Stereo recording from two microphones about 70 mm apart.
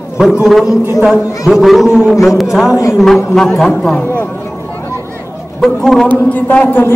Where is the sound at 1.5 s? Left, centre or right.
Centre.